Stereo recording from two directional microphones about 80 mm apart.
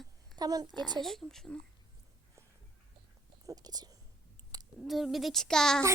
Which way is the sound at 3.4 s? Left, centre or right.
Right.